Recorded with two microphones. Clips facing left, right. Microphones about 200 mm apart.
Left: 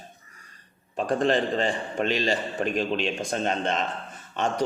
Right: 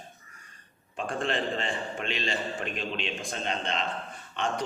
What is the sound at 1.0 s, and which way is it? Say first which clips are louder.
A man's voice: left 7 dB; 40° left (ahead or behind).